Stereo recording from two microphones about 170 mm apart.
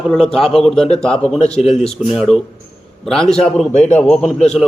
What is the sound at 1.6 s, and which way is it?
Speech, 35° left (ahead or behind).